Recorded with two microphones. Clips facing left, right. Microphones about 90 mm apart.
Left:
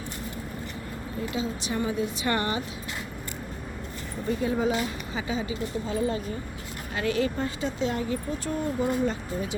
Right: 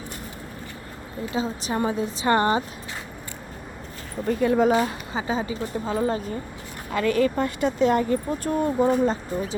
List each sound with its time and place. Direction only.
1.3 s a woman's voice: 40° right (ahead or behind)
4.3 s speech: 60° right (ahead or behind)
4.8 s a woman's voice: 40° right (ahead or behind); by 8.2 s 55° right (ahead or behind)
8.4 s a woman's voice: 35° right (ahead or behind)